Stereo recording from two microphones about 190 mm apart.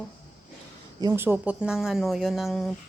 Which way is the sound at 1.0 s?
15° right (ahead or behind).